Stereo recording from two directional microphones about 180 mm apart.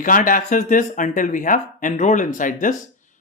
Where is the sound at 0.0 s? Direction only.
50° left (ahead or behind).